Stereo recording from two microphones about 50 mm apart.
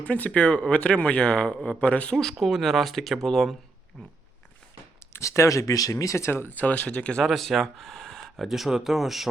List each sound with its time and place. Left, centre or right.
0.0 s speech: left
0.3 s speech: left
2.3 s speech: centre
4.9 s speech: left
6.6 s speech: left
7.2 s speech: centre
8.4 s speech: centre